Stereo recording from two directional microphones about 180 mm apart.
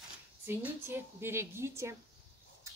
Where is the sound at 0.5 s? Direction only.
10° right (ahead or behind).